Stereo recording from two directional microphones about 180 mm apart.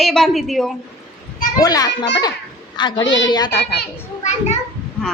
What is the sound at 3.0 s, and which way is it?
Speech, 90° left.